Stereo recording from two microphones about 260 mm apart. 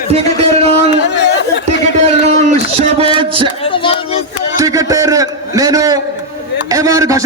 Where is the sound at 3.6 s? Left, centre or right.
Centre.